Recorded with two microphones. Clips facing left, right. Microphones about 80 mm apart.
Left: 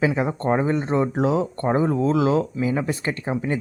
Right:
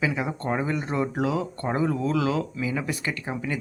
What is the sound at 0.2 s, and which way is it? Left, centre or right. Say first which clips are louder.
Speech: left 6 dB; left.